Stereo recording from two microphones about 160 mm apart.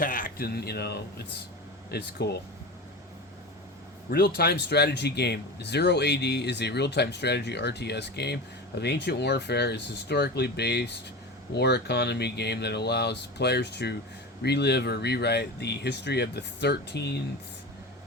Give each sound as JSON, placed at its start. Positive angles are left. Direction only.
{"t": 0.0, "sound": "a man's voice", "side_deg": 60}
{"t": 4.1, "sound": "speech", "side_deg": 75}